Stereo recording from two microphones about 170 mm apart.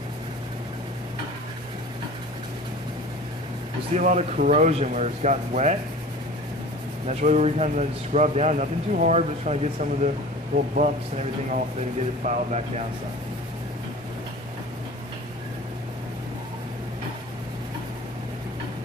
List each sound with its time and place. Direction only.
3.9 s speech: 45° right (ahead or behind)
7.1 s speech: 40° right (ahead or behind)